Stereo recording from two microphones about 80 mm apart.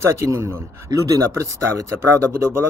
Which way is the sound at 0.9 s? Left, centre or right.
Right.